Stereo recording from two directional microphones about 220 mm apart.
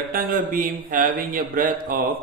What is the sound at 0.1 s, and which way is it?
A man's voice, 40° right (ahead or behind).